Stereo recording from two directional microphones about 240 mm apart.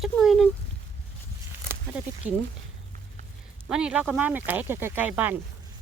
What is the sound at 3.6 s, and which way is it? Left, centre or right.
Speech, centre.